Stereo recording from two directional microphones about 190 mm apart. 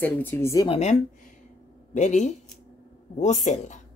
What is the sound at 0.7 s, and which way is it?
Speech, 35° left (ahead or behind).